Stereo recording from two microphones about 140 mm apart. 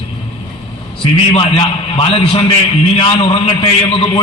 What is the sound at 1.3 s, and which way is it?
A man's voice, 40° left (ahead or behind).